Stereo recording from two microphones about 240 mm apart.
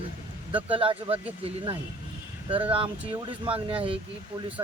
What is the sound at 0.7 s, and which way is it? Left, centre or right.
Speech, right.